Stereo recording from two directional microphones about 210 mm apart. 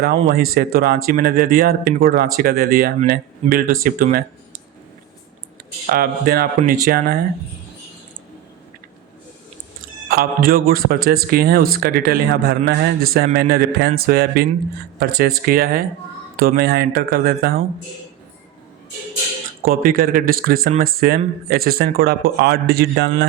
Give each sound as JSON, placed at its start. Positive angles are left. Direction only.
{"t": 0.3, "sound": "speech", "side_deg": -45}
{"t": 5.8, "sound": "speech", "side_deg": -45}
{"t": 10.1, "sound": "speech", "side_deg": -45}
{"t": 19.6, "sound": "speech", "side_deg": -40}